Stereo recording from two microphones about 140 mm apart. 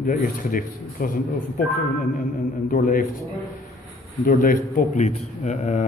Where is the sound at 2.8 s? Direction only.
70° left (ahead or behind).